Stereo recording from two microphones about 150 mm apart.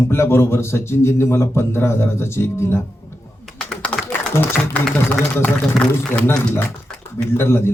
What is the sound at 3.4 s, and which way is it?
Typing, centre (ahead or behind).